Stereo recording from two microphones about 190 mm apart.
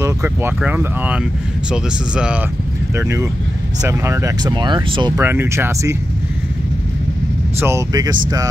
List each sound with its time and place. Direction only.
0.0 s speech: 15° right (ahead or behind)
5.2 s speech: 10° right (ahead or behind)
7.6 s speech: 15° right (ahead or behind)